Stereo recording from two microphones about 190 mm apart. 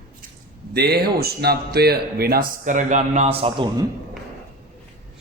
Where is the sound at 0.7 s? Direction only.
55° right (ahead or behind); by 3.8 s 25° right (ahead or behind).